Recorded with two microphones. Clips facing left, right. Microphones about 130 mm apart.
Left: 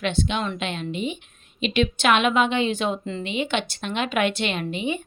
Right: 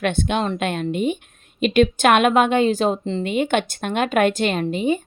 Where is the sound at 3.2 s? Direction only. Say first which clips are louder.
Right 6 dB; 50° right (ahead or behind).